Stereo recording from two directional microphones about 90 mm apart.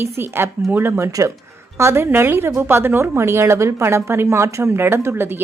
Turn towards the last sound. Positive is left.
turn(degrees=-25)  # may be behind; listen again after turning